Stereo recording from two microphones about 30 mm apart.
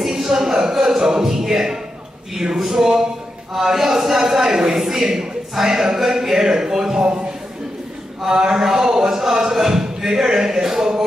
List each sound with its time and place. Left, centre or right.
0.0 s music: centre
2.6 s a man's voice: centre
8.3 s a man's voice: centre